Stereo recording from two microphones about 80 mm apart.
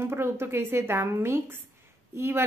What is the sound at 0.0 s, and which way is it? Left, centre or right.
A woman's voice, right.